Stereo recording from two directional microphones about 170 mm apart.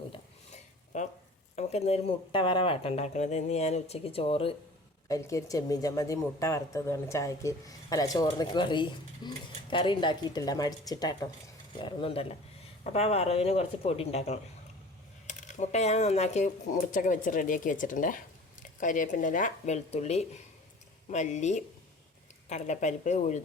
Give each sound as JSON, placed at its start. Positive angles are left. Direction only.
{"t": 0.1, "sound": "dishes", "side_deg": 40}
{"t": 1.5, "sound": "speech", "side_deg": 40}
{"t": 5.0, "sound": "speech", "side_deg": 20}